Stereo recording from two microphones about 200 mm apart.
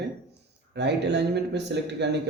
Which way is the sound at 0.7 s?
60° right (ahead or behind).